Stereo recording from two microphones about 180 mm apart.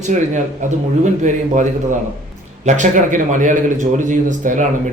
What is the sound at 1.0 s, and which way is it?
A man's voice, 45° right (ahead or behind).